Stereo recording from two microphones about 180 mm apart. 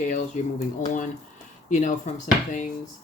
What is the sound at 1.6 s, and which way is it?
Speech, 45° left (ahead or behind).